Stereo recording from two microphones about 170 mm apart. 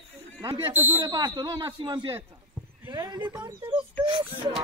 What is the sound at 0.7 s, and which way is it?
Speech, 10° right (ahead or behind).